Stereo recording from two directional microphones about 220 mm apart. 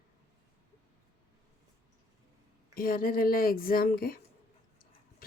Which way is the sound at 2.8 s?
40° left (ahead or behind).